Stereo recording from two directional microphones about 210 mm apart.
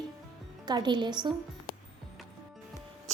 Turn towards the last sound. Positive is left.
turn(degrees=-35)  # may be behind; listen again after turning